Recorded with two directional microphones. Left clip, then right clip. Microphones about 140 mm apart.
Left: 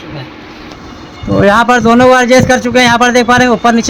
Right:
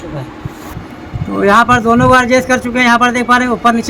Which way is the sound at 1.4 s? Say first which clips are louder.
Left 1 dB; 50° left (ahead or behind).